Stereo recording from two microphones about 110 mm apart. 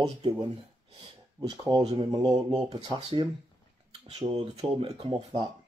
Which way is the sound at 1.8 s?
55° right (ahead or behind).